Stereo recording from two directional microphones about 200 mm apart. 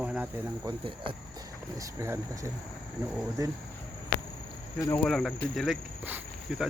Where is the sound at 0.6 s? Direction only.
25° right (ahead or behind).